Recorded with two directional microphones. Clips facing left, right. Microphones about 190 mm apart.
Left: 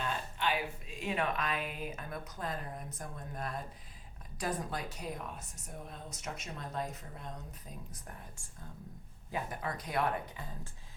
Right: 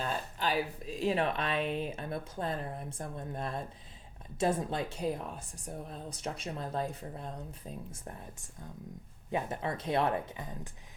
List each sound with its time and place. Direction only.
0.0 s speech: 40° right (ahead or behind); by 10.7 s 20° right (ahead or behind)